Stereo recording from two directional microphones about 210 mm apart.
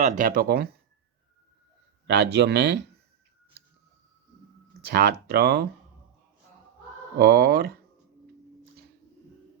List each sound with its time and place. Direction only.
0.0 s speech: 35° right (ahead or behind)
2.0 s speech: 55° right (ahead or behind)
4.9 s speech: 50° right (ahead or behind)
7.2 s speech: 50° right (ahead or behind)